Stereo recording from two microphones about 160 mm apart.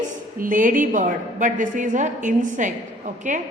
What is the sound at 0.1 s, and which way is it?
A woman's voice, 55° right (ahead or behind).